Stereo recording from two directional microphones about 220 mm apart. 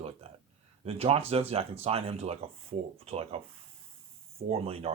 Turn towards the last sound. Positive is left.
turn(degrees=-25)  # may be behind; listen again after turning